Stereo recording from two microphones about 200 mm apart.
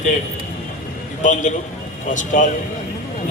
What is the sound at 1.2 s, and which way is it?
A man's voice, 40° left (ahead or behind).